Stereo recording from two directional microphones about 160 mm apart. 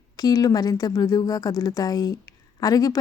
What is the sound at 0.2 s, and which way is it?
Speech, 25° left (ahead or behind).